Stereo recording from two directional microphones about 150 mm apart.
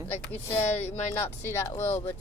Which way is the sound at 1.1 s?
15° left (ahead or behind).